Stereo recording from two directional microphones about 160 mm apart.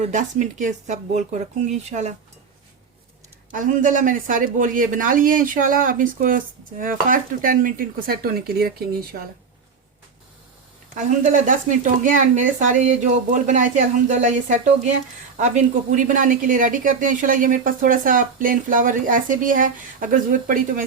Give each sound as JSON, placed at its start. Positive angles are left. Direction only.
{"t": 0.0, "sound": "speech", "side_deg": -50}
{"t": 3.5, "sound": "speech", "side_deg": -55}
{"t": 10.9, "sound": "speech", "side_deg": -50}